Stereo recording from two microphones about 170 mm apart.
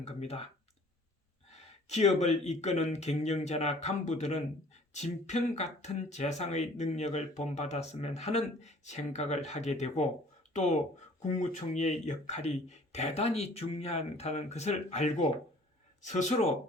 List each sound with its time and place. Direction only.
0.0 s speech: 40° left (ahead or behind)
1.5 s speech: 40° left (ahead or behind)